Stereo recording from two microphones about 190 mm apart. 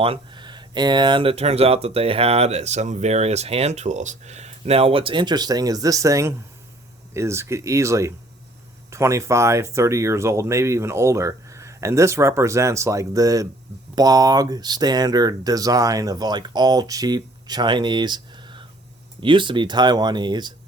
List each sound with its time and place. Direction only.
0.0 s speech: 25° right (ahead or behind)